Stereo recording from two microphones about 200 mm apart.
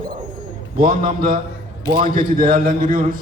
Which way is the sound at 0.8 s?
45° right (ahead or behind).